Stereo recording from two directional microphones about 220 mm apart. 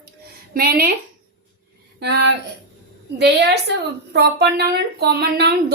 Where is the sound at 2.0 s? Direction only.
50° right (ahead or behind).